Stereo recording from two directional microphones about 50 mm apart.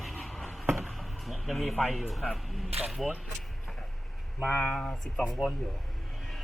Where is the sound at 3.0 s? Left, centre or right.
Centre.